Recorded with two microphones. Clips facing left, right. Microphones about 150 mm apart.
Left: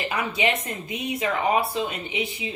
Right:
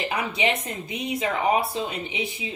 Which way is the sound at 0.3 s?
25° right (ahead or behind).